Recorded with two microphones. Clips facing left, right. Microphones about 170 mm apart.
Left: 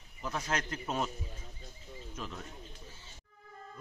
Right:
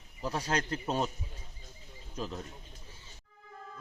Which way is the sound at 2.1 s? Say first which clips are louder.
Right 6 dB; 35° right (ahead or behind).